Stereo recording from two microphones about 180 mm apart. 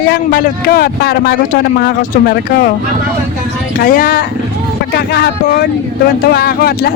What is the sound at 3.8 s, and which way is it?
Speech, 50° left (ahead or behind).